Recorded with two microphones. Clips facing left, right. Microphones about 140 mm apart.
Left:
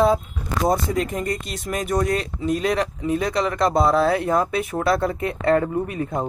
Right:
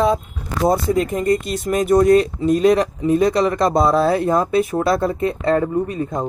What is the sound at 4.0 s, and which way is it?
Speech, 30° right (ahead or behind).